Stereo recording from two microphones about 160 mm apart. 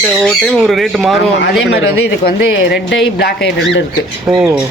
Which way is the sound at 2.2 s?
90° left.